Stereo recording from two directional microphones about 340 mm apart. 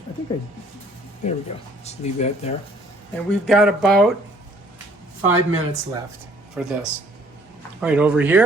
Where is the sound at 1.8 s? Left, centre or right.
Centre.